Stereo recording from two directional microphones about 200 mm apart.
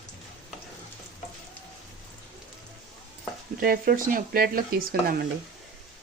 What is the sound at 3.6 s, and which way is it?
Speech, 45° right (ahead or behind).